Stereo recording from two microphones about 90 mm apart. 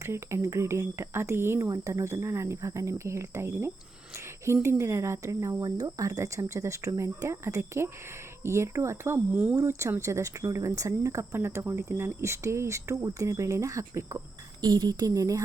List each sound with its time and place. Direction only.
0.0 s speech: 30° right (ahead or behind)
9.1 s speech: 15° right (ahead or behind)
9.6 s speech: 35° right (ahead or behind)
14.6 s speech: 55° right (ahead or behind)